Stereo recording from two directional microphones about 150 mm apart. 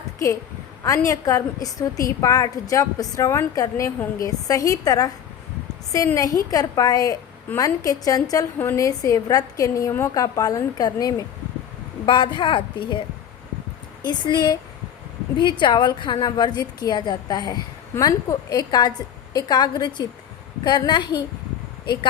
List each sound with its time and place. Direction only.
0.9 s a woman's voice: 20° left (ahead or behind)
6.5 s a woman's voice: 25° left (ahead or behind)
14.0 s a woman's voice: 30° left (ahead or behind)